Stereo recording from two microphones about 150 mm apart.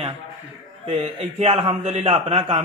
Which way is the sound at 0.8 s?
45° right (ahead or behind).